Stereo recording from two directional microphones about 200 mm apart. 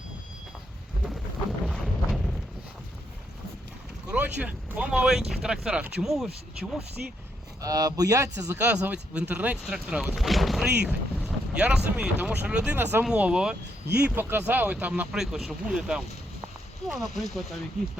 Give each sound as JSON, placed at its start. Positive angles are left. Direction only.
{"t": 1.6, "sound": "a sound", "side_deg": 0}
{"t": 4.1, "sound": "speech", "side_deg": -5}
{"t": 7.6, "sound": "speech", "side_deg": -15}
{"t": 10.8, "sound": "boat", "side_deg": -5}
{"t": 11.9, "sound": "speech", "side_deg": -5}